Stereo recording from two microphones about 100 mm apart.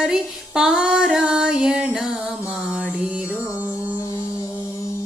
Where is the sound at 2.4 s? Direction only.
25° left (ahead or behind).